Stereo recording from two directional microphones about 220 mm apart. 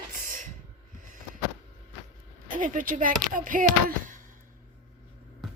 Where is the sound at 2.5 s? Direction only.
40° right (ahead or behind).